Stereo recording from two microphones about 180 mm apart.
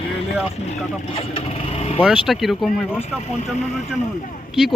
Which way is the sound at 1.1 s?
35° left (ahead or behind).